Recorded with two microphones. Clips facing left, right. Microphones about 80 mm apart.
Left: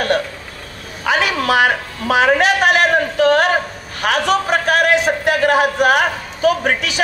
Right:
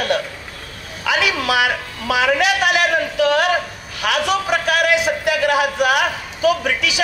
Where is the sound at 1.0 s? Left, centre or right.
Left.